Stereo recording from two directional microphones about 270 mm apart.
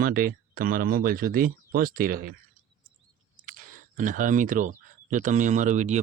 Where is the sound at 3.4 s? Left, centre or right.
Right.